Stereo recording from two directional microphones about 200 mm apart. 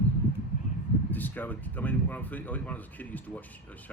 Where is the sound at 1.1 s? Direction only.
10° left (ahead or behind).